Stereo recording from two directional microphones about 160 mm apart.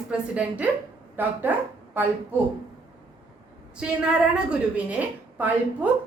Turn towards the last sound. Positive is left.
turn(degrees=-10)  # may be behind; listen again after turning